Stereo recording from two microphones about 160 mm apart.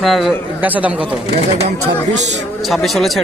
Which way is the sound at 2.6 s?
Centre (ahead or behind).